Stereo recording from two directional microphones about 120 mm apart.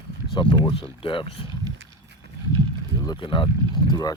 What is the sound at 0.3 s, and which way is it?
Speech, 45° left (ahead or behind).